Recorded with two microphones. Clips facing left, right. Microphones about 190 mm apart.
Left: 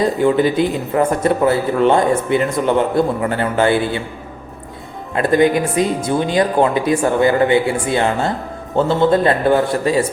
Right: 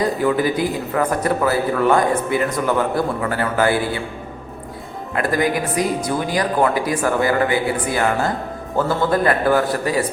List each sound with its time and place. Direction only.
0.0 s a man's voice: 25° left (ahead or behind)
5.1 s a man's voice: 25° left (ahead or behind)